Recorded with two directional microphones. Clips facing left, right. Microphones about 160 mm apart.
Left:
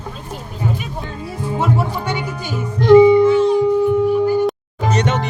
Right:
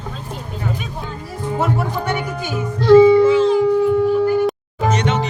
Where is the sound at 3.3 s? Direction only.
90° right.